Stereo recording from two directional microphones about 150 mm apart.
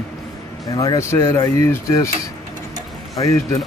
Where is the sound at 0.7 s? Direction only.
20° left (ahead or behind).